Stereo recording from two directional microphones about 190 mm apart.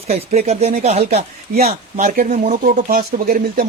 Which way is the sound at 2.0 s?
45° right (ahead or behind).